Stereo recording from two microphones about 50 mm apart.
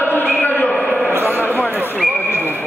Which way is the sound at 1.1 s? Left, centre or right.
Right.